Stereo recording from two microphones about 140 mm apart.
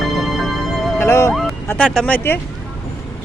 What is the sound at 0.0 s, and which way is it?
Music, centre (ahead or behind).